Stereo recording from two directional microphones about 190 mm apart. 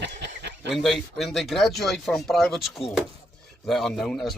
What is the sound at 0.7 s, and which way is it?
Speech, centre (ahead or behind).